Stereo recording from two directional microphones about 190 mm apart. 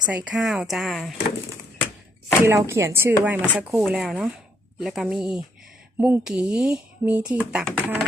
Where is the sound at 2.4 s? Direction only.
15° right (ahead or behind).